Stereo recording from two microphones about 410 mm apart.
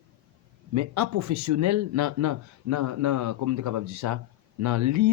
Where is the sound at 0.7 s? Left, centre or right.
Right.